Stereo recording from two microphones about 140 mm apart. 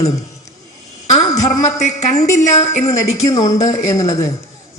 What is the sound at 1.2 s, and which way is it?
Speech, 25° left (ahead or behind).